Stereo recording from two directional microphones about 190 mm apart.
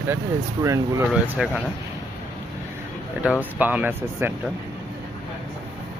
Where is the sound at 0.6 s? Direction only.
15° right (ahead or behind).